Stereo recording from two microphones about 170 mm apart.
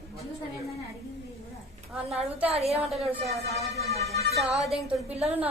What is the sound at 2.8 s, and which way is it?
Speech, centre (ahead or behind).